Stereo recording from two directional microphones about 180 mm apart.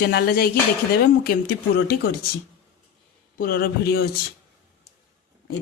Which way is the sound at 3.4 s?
55° left (ahead or behind).